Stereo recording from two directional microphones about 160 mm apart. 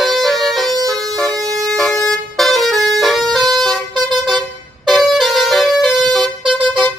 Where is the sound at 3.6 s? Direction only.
Centre (ahead or behind).